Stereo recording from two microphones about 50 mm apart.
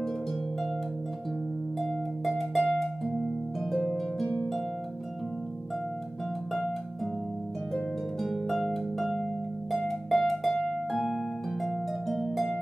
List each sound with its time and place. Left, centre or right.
1.8 s music: centre
3.7 s harp: centre
7.7 s harp: centre